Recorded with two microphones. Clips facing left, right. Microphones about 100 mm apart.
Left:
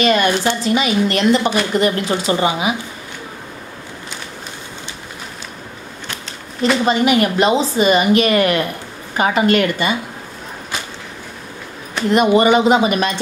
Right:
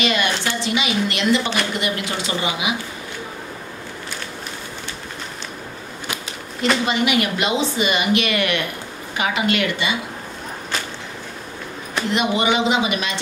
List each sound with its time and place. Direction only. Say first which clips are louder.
0.0 s a woman's voice: left 6 dB; 40° left (ahead or behind)
6.9 s a woman's voice: left 5 dB; 40° left (ahead or behind)
12.1 s speech: left 8 dB; 45° left (ahead or behind)